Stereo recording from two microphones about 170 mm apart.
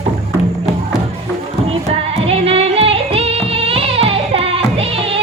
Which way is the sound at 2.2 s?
35° right (ahead or behind).